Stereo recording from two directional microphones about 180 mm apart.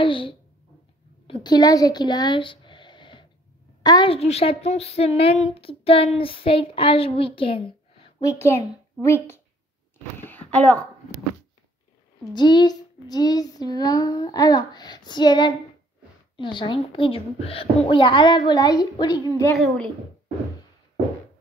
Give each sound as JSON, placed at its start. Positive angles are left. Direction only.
{"t": 0.0, "sound": "a child's voice", "side_deg": 30}
{"t": 8.2, "sound": "a child's voice", "side_deg": 15}
{"t": 10.2, "sound": "a sound", "side_deg": 10}
{"t": 12.4, "sound": "child singing", "side_deg": 25}
{"t": 19.6, "sound": "speech", "side_deg": 0}